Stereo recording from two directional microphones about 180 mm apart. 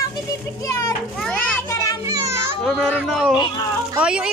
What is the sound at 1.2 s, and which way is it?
Children playing, 5° left (ahead or behind).